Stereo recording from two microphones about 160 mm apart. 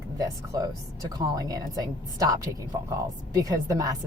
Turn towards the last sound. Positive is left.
turn(degrees=-20)  # may be behind; listen again after turning